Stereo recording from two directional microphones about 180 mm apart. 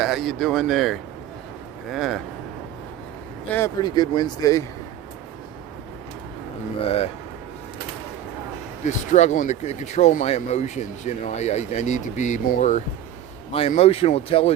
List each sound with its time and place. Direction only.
0.0 s speech: centre (ahead or behind)
3.8 s speech: 25° left (ahead or behind)
6.8 s speech: 35° left (ahead or behind)
8.8 s speech: 40° left (ahead or behind)